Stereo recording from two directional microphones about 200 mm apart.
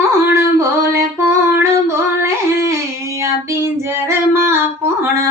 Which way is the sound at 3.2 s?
15° right (ahead or behind).